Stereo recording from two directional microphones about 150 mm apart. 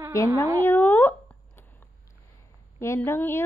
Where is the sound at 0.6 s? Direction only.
15° left (ahead or behind).